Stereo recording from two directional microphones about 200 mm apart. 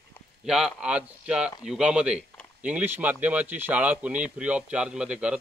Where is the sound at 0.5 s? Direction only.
5° right (ahead or behind).